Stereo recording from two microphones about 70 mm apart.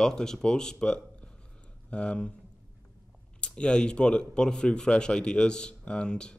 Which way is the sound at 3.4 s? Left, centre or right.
Centre.